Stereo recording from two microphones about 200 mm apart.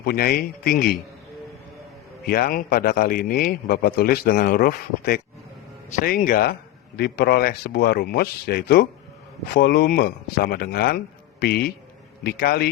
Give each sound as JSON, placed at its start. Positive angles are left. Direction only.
{"t": 0.0, "sound": "a man's voice", "side_deg": 50}
{"t": 2.2, "sound": "a man's voice", "side_deg": 50}